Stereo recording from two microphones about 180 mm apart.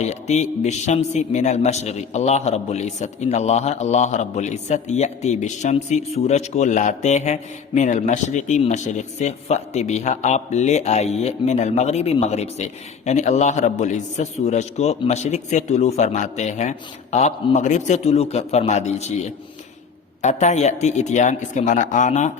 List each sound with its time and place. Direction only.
0.0 s a man's voice: 40° left (ahead or behind)